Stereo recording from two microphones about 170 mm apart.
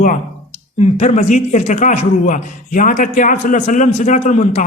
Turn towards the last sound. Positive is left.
turn(degrees=45)  # may be behind; listen again after turning